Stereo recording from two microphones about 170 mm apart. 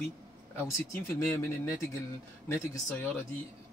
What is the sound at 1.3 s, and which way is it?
Speech, 15° left (ahead or behind).